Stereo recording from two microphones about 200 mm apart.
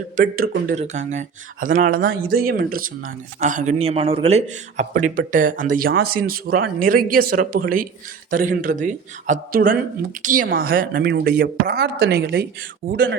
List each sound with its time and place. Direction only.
0.2 s a woman's voice: 45° right (ahead or behind)